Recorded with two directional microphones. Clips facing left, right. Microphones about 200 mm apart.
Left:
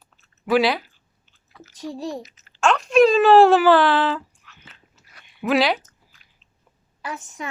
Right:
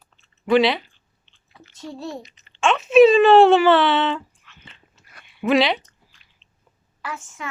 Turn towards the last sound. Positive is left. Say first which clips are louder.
# left 1 dB
turn(degrees=15)  # may be behind; listen again after turning